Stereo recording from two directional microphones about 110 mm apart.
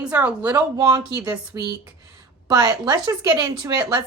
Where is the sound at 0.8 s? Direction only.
35° right (ahead or behind).